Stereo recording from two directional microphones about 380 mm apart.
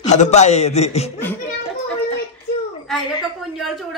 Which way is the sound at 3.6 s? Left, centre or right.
Centre.